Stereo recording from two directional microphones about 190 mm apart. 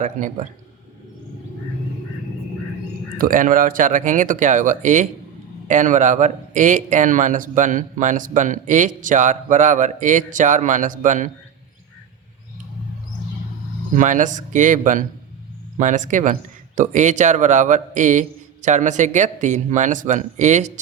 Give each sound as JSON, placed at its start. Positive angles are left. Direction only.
{"t": 0.0, "sound": "a man's voice", "side_deg": -40}
{"t": 3.2, "sound": "a man's voice", "side_deg": -45}
{"t": 13.9, "sound": "a man's voice", "side_deg": -40}